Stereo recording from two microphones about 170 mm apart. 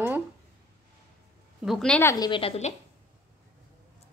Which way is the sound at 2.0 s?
20° left (ahead or behind).